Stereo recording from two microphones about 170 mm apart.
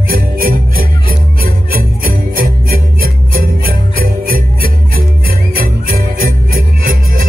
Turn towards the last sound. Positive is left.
turn(degrees=-55)  # may be behind; listen again after turning